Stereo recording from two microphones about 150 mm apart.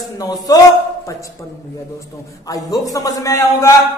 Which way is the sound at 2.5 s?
25° left (ahead or behind).